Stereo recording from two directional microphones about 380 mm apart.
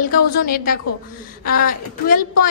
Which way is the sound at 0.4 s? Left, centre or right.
Left.